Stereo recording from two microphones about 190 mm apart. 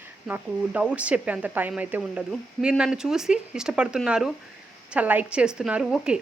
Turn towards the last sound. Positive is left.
turn(degrees=-5)  # may be behind; listen again after turning